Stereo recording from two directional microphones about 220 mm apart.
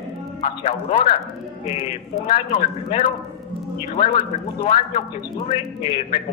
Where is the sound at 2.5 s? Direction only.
25° left (ahead or behind).